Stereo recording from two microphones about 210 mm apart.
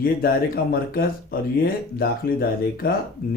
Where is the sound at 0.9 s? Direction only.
45° left (ahead or behind).